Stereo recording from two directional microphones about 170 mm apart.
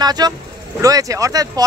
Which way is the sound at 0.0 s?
25° right (ahead or behind).